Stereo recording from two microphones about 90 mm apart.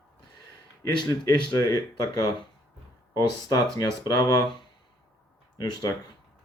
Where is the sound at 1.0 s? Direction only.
50° left (ahead or behind).